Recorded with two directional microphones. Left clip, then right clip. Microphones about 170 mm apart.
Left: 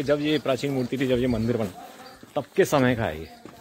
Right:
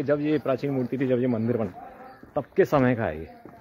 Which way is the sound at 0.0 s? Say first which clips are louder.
Left 1 dB; 5° left (ahead or behind).